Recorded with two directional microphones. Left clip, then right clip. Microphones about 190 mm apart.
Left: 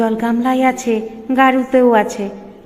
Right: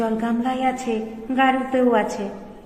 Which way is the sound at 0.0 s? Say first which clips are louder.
Left 6 dB; 20° left (ahead or behind).